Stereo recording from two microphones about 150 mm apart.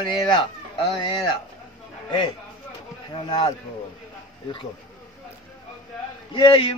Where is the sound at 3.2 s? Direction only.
35° left (ahead or behind).